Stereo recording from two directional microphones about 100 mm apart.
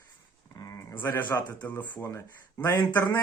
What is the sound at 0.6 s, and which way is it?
Speech, 40° left (ahead or behind).